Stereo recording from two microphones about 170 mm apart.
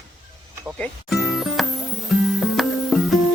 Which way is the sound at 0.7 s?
5° left (ahead or behind).